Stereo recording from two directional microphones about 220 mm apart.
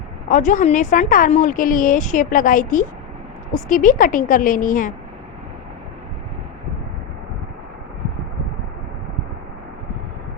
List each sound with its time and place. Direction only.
0.3 s a woman's voice: 35° left (ahead or behind)